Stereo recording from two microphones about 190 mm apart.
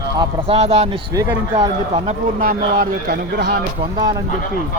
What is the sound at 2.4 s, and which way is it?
Speech, 50° right (ahead or behind).